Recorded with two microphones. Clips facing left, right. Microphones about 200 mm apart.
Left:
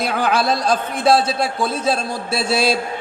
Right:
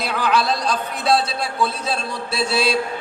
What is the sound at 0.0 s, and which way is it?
A man's voice, 50° left (ahead or behind).